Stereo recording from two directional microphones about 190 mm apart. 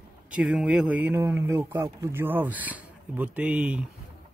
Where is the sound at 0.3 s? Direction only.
5° right (ahead or behind).